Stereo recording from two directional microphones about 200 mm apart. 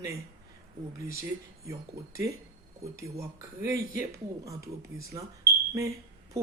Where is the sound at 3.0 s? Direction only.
15° right (ahead or behind).